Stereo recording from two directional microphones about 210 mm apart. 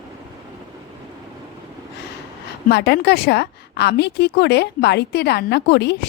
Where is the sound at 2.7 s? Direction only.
50° left (ahead or behind).